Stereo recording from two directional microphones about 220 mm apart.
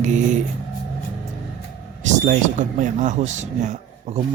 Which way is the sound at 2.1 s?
35° right (ahead or behind).